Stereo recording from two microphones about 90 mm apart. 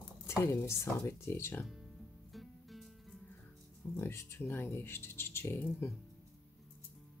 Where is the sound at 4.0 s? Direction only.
30° left (ahead or behind).